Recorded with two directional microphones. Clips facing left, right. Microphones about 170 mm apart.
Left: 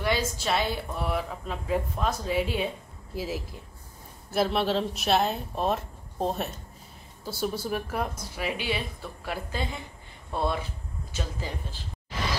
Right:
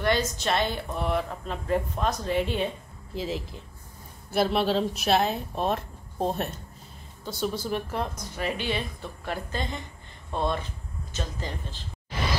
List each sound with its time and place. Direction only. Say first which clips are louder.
0.0 s a woman's voice: right 2 dB; 5° left (ahead or behind)